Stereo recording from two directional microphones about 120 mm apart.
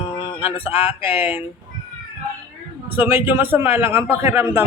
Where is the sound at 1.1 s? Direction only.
15° right (ahead or behind).